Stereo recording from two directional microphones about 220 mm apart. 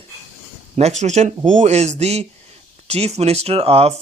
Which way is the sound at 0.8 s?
30° right (ahead or behind).